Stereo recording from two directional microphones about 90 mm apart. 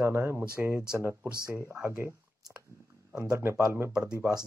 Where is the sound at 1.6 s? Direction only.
30° right (ahead or behind).